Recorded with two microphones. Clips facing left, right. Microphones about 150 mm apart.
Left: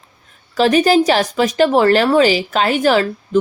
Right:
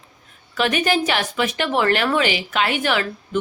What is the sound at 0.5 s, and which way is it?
Speech, 35° left (ahead or behind).